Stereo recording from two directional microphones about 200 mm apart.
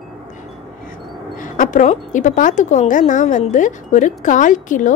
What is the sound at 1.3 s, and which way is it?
A woman's voice, 40° left (ahead or behind).